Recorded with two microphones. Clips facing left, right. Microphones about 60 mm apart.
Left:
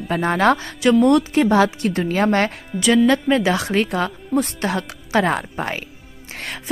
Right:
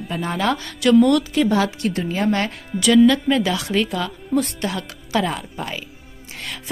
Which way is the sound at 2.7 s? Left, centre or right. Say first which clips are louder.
Right 2 dB; centre.